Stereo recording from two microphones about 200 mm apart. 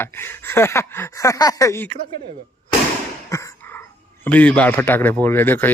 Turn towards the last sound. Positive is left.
turn(degrees=10)  # may be behind; listen again after turning